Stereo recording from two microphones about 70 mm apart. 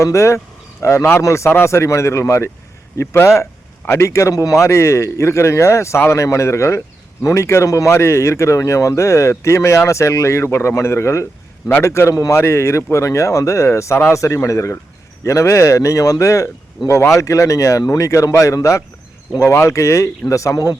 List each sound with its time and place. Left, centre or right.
0.0 s a man's voice: left